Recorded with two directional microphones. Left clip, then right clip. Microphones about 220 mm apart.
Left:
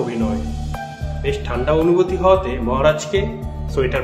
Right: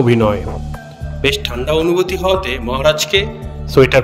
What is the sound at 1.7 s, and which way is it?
A man's voice, 40° right (ahead or behind).